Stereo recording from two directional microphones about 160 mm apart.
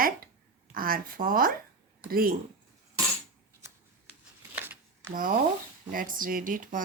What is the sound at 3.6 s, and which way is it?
Shuffling cards, 20° right (ahead or behind).